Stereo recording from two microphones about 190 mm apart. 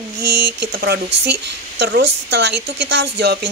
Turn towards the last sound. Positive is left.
turn(degrees=-60)  # may be behind; listen again after turning